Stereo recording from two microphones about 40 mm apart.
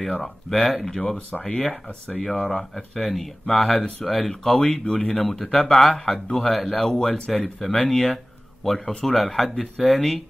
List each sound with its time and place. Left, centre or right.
0.0 s speech: centre
1.3 s speech: centre
4.6 s speech: left
5.7 s speech: centre
6.8 s speech: centre